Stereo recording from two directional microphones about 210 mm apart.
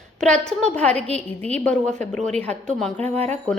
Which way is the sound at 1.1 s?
30° right (ahead or behind).